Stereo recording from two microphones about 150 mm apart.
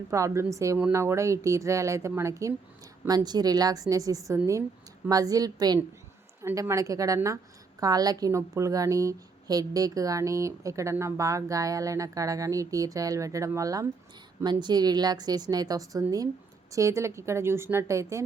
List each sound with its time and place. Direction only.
0.1 s a woman's voice: 20° right (ahead or behind)